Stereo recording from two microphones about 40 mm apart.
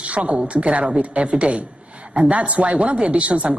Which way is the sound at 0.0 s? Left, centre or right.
Right.